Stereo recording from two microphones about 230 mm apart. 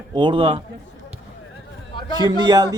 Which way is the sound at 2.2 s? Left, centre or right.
Centre.